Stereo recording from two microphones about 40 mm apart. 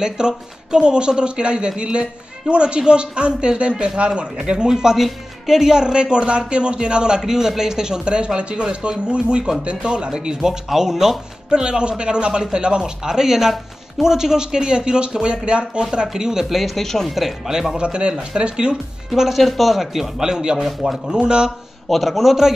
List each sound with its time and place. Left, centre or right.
0.0 s a man's voice: centre
11.5 s a man's voice: right; by 16.7 s centre
16.7 s speech: centre
17.5 s a man's voice: centre
19.0 s speech: centre
20.6 s speech: centre
21.1 s a man's voice: right
21.5 s speech: centre